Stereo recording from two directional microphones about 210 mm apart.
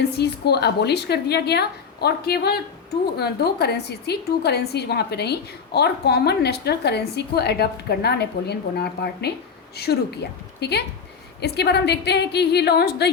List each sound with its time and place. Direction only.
0.0 s a woman's voice: 50° left (ahead or behind)